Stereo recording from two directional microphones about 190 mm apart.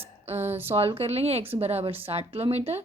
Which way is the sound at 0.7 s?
30° right (ahead or behind).